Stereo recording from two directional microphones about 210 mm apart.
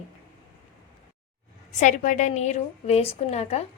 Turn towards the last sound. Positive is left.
turn(degrees=30)  # may be behind; listen again after turning